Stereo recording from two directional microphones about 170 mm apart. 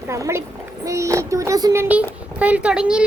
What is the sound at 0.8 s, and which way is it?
Child singing, 20° right (ahead or behind).